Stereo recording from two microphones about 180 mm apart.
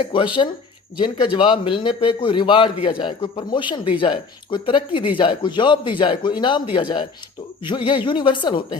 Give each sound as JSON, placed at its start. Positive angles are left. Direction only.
{"t": 0.0, "sound": "a man's voice", "side_deg": 30}